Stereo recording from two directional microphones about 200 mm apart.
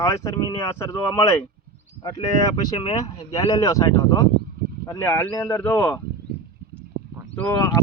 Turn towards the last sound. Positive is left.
turn(degrees=10)  # may be behind; listen again after turning